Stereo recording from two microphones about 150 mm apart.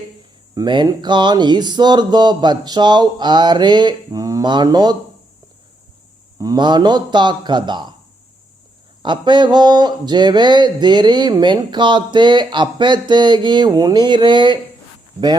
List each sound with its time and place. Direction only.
0.5 s speech: 30° right (ahead or behind)
6.4 s speech: 25° right (ahead or behind)
9.0 s a sound: 30° right (ahead or behind)